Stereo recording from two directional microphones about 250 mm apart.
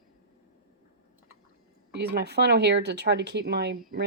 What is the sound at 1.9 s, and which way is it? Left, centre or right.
Speech, right.